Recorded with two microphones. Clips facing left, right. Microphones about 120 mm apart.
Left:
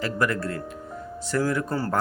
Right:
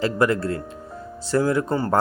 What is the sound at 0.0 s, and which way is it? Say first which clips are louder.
Speech: right 5 dB; 25° right (ahead or behind).